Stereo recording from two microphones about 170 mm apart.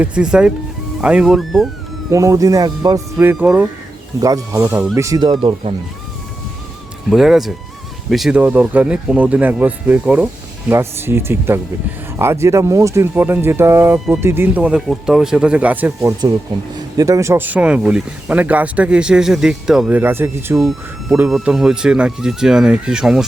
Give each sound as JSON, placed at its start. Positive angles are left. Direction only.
{"t": 0.0, "sound": "speech", "side_deg": -5}
{"t": 2.0, "sound": "speech", "side_deg": -20}
{"t": 3.3, "sound": "speech", "side_deg": -5}
{"t": 4.2, "sound": "speech", "side_deg": -20}
{"t": 7.1, "sound": "speech", "side_deg": 0}
{"t": 20.6, "sound": "speech", "side_deg": 0}